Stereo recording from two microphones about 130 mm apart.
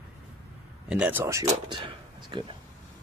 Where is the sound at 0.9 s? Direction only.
10° right (ahead or behind).